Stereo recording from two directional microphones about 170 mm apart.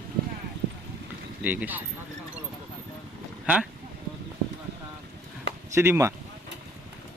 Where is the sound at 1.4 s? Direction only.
10° right (ahead or behind).